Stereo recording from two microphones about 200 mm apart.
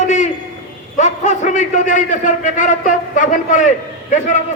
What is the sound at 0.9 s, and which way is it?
A man's voice, 35° left (ahead or behind).